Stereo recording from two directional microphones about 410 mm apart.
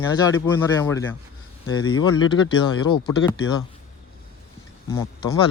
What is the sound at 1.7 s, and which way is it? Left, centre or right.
Speech, left.